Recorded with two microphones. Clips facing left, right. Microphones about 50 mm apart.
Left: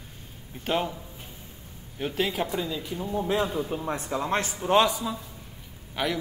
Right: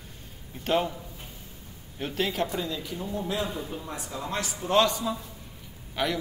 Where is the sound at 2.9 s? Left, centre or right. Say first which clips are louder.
Left 5 dB; centre; by 4.7 s left.